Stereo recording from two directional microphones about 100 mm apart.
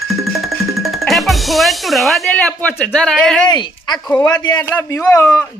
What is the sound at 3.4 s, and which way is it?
Speech, 45° left (ahead or behind).